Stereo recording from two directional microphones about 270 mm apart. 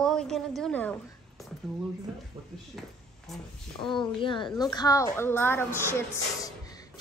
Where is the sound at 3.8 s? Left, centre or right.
Centre.